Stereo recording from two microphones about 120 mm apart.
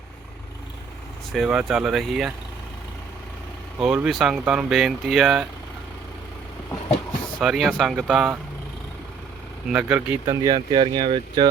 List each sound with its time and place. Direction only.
1.3 s speech: 5° right (ahead or behind)
3.8 s speech: 5° right (ahead or behind)
7.3 s speech: centre (ahead or behind)
9.6 s speech: 10° right (ahead or behind)
10.2 s speech: 30° right (ahead or behind)